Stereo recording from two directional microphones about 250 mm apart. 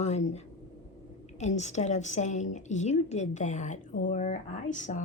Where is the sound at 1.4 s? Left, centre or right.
Left.